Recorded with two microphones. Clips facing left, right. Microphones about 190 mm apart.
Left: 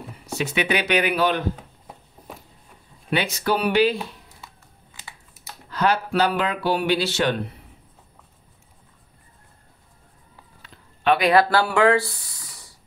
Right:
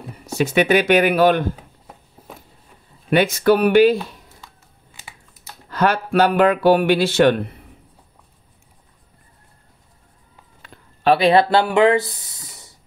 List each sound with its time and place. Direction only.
0.4 s speech: 45° right (ahead or behind)
3.1 s speech: 50° right (ahead or behind)
5.7 s speech: 55° right (ahead or behind)
11.1 s speech: 30° right (ahead or behind)